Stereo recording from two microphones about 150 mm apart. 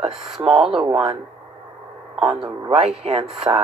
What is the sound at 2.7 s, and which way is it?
Speech, 45° right (ahead or behind).